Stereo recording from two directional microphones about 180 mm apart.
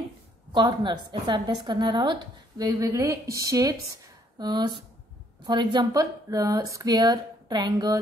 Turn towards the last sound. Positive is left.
turn(degrees=-25)  # may be behind; listen again after turning